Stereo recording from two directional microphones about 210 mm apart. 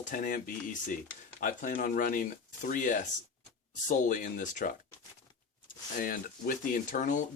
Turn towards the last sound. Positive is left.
turn(degrees=40)  # may be behind; listen again after turning